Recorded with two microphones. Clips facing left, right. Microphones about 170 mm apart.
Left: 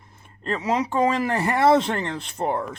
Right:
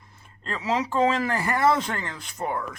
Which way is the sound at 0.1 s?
20° left (ahead or behind).